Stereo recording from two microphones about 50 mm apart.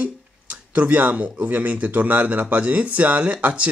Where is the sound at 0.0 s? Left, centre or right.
Right.